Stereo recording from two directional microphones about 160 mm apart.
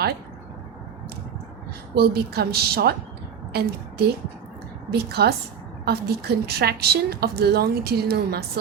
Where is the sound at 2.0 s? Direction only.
80° right.